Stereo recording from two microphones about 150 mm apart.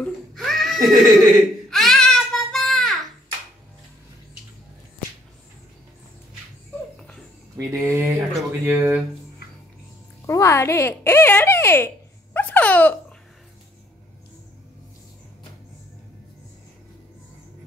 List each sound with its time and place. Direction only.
0.0 s a sound: centre (ahead or behind)
7.0 s dog: 5° left (ahead or behind)
7.5 s speech: 20° right (ahead or behind)
10.2 s speech: 20° left (ahead or behind)
12.4 s hiccup: 10° left (ahead or behind)